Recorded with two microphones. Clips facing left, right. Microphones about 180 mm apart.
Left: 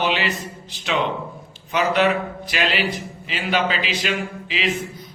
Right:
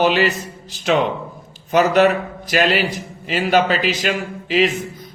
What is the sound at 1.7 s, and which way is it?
A man's voice, 45° right (ahead or behind).